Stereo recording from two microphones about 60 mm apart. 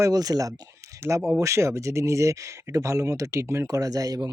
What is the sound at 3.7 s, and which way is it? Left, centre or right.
Speech, right.